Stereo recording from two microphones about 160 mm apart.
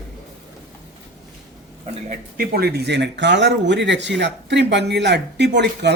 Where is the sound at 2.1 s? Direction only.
60° right (ahead or behind).